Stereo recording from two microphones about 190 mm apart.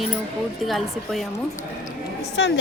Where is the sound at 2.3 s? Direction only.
65° left (ahead or behind).